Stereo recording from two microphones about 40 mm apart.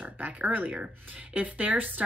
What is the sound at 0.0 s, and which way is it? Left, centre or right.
Speech, right.